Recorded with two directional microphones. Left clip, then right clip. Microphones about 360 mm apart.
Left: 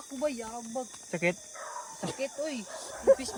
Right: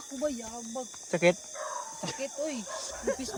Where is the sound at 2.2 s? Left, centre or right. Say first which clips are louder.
Left 1 dB; centre.